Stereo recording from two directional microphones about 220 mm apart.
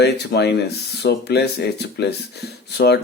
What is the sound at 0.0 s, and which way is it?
Speech, 50° left (ahead or behind).